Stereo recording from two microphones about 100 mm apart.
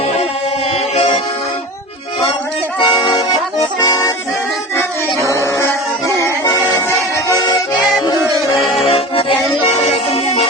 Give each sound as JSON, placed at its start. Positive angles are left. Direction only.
{"t": 2.7, "sound": "music", "side_deg": 60}
{"t": 3.8, "sound": "accordion", "side_deg": 40}
{"t": 4.8, "sound": "music", "side_deg": 30}
{"t": 8.9, "sound": "music", "side_deg": 70}